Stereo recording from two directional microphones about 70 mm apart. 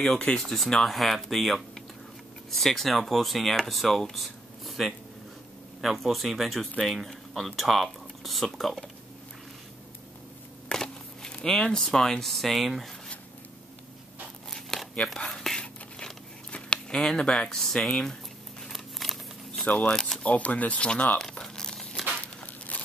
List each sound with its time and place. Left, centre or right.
0.0 s speech: centre
10.7 s speech: centre
14.5 s a sound: centre
15.1 s whispering: centre
16.5 s speech: centre
18.7 s a sound: centre
19.6 s speech: centre
20.2 s speech: left
21.2 s crumpling: centre